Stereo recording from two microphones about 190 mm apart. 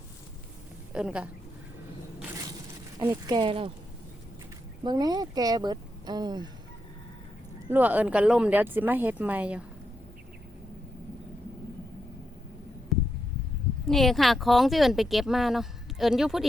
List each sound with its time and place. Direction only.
0.9 s speech: 5° right (ahead or behind)
3.0 s speech: 20° right (ahead or behind)
4.8 s speech: 20° right (ahead or behind)
7.7 s speech: 10° right (ahead or behind)
12.9 s a sound: centre (ahead or behind)
13.8 s speech: centre (ahead or behind)